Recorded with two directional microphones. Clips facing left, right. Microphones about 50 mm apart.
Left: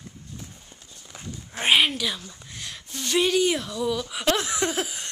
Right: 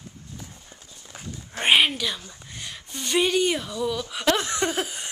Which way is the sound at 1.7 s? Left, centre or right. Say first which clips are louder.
Right 1 dB; centre.